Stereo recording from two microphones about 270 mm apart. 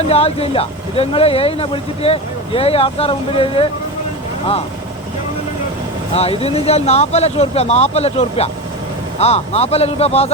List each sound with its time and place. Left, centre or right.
0.0 s speech: left
6.4 s speech: left